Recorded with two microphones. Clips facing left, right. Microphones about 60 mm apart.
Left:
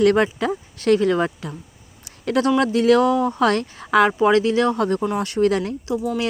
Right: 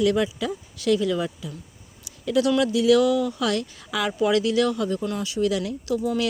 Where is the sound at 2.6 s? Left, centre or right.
Left.